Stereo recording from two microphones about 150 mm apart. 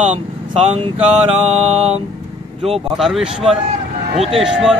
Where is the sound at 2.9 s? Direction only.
Centre (ahead or behind).